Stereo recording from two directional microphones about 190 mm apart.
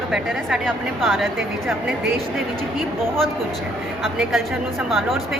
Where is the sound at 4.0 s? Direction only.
Centre (ahead or behind).